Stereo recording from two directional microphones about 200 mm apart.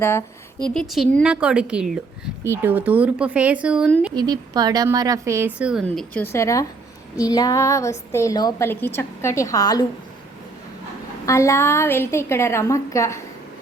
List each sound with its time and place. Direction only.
0.0 s a woman's voice: 10° left (ahead or behind); by 3.9 s 5° right (ahead or behind)
4.1 s a woman's voice: 20° right (ahead or behind)
5.5 s speech: 5° right (ahead or behind); by 9.8 s 20° left (ahead or behind)
11.3 s speech: 15° left (ahead or behind)